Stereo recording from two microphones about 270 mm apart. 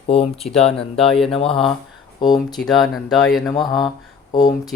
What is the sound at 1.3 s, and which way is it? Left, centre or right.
Speech, centre.